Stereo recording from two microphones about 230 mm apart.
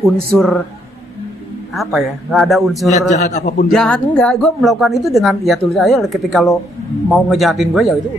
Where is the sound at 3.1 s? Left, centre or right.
Left.